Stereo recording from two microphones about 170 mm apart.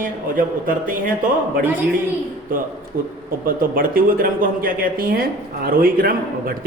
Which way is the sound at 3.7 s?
55° right (ahead or behind).